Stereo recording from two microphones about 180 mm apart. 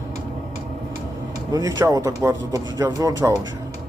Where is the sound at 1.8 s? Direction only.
15° right (ahead or behind).